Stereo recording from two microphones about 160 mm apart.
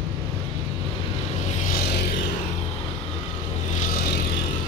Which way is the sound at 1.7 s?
85° left.